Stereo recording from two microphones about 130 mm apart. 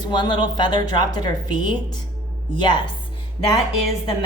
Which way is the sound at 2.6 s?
35° left (ahead or behind).